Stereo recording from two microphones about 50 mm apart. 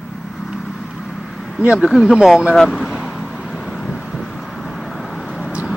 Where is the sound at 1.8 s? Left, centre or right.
Centre.